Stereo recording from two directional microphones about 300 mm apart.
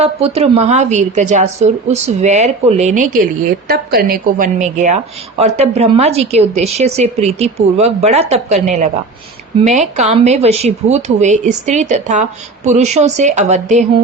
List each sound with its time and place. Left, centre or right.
0.0 s a woman's voice: centre